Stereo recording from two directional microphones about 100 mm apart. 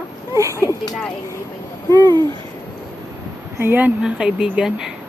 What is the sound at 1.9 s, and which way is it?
Owl, 45° right (ahead or behind).